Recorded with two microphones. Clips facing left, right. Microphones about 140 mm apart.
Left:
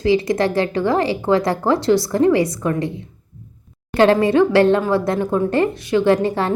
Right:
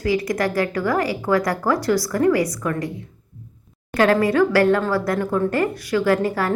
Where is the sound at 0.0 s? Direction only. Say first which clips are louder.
Left 4 dB; 25° left (ahead or behind).